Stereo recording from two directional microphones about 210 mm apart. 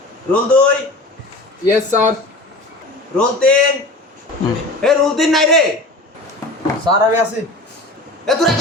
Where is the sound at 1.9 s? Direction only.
35° right (ahead or behind).